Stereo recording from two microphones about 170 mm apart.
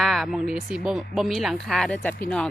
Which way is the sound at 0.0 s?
Centre (ahead or behind).